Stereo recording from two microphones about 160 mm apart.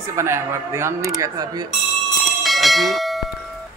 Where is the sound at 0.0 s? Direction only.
15° right (ahead or behind).